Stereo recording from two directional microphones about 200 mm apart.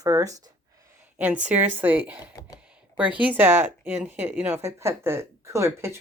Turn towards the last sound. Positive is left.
turn(degrees=-15)  # may be behind; listen again after turning